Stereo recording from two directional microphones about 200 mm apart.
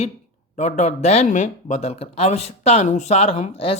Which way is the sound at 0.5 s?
35° left (ahead or behind).